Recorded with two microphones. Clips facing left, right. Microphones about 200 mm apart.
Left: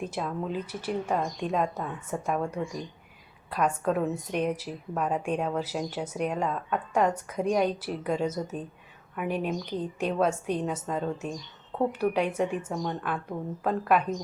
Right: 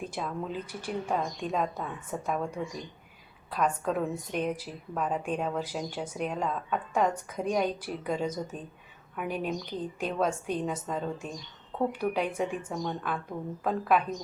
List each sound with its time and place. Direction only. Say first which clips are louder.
0.0 s a woman's voice: left 3 dB; 5° left (ahead or behind)
3.5 s a woman's voice: left 2 dB; 5° left (ahead or behind)